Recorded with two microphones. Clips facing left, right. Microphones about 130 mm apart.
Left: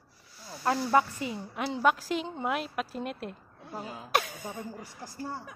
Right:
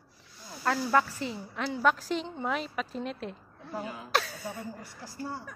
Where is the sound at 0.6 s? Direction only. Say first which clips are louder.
Left 1 dB; 20° left (ahead or behind).